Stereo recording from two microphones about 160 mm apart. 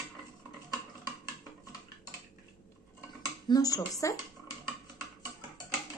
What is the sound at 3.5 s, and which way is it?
Speech, 25° left (ahead or behind).